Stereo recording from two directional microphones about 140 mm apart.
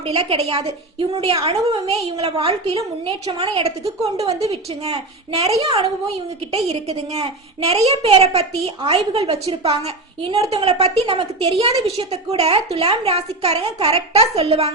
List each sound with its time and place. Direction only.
0.0 s a woman's voice: 45° right (ahead or behind)